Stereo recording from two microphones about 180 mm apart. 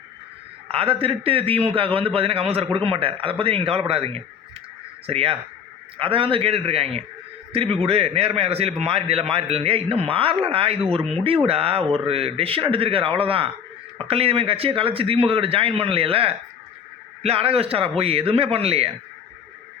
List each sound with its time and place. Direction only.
0.7 s a man's voice: 30° right (ahead or behind)